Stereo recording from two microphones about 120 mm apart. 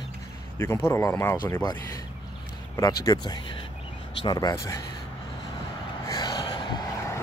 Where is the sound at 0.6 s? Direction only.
20° left (ahead or behind).